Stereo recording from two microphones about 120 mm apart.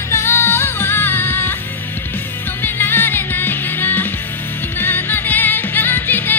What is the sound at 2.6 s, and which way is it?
Music, 15° left (ahead or behind).